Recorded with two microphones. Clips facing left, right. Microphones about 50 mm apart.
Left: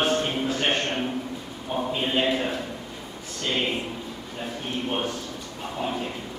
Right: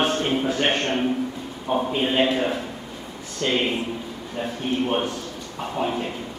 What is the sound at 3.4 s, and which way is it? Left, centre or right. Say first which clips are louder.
A man's voice: right 4 dB; centre.